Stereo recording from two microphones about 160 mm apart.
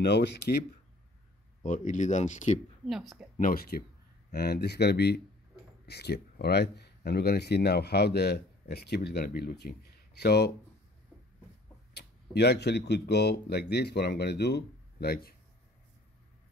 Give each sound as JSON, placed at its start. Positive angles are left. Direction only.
{"t": 0.0, "sound": "speech", "side_deg": 90}
{"t": 1.6, "sound": "speech", "side_deg": 50}
{"t": 2.9, "sound": "speech", "side_deg": 0}
{"t": 3.3, "sound": "speech", "side_deg": 65}
{"t": 4.3, "sound": "speech", "side_deg": 90}
{"t": 11.9, "sound": "speech", "side_deg": 90}